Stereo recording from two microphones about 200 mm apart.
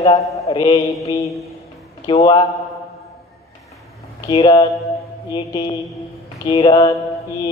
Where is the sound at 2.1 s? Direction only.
30° left (ahead or behind).